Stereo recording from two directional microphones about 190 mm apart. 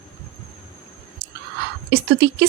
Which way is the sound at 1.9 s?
60° right (ahead or behind).